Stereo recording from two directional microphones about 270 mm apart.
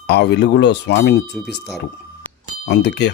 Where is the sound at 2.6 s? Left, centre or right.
Left.